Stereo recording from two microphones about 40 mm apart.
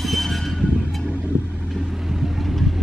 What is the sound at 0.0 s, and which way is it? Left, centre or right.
Train, centre.